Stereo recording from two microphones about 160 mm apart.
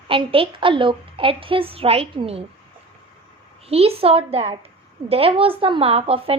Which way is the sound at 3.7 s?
40° right (ahead or behind).